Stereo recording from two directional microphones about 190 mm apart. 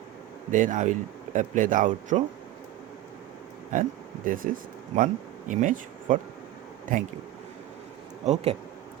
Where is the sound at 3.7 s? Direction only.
45° right (ahead or behind).